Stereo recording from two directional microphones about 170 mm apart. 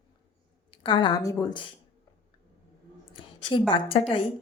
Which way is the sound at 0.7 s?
30° left (ahead or behind).